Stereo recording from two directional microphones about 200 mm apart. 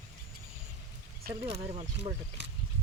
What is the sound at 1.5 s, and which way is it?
Speech, 35° right (ahead or behind).